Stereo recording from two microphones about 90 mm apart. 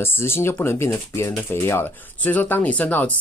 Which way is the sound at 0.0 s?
25° left (ahead or behind).